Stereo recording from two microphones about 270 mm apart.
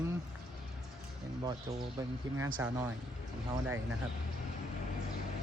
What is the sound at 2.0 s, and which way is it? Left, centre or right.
Speech, centre.